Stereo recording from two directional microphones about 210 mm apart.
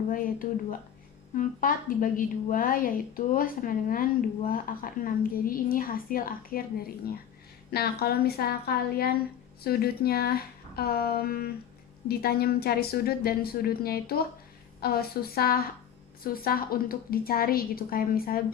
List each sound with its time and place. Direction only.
0.1 s a woman's voice: 40° left (ahead or behind)